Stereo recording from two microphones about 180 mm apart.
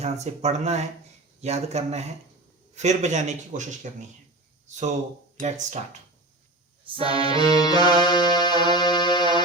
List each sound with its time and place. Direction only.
0.0 s a man's voice: 40° right (ahead or behind)
7.0 s accordion: 30° right (ahead or behind)
7.4 s music: 20° left (ahead or behind)